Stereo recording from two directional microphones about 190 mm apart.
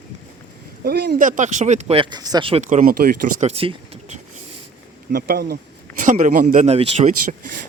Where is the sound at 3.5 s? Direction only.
30° right (ahead or behind).